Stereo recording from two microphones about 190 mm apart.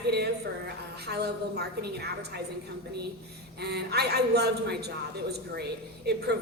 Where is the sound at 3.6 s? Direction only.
60° right (ahead or behind).